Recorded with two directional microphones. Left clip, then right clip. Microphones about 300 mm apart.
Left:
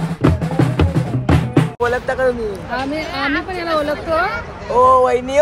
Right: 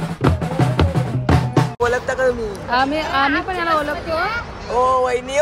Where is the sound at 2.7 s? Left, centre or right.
Right.